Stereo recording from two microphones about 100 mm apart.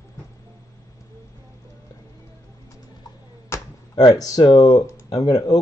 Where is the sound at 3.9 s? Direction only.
40° left (ahead or behind).